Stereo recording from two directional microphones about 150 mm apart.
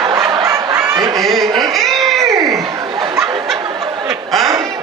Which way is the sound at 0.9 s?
25° right (ahead or behind).